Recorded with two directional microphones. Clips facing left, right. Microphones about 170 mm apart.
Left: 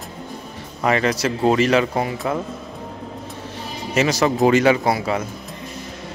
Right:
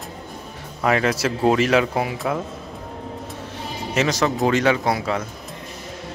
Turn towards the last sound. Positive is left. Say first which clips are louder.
# left 2 dB
turn(degrees=5)  # may be behind; listen again after turning